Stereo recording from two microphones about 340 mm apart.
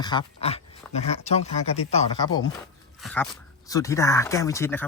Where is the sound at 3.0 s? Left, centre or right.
Centre.